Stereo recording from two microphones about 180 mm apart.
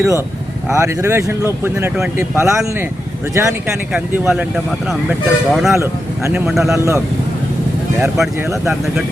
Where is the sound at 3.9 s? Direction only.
10° right (ahead or behind).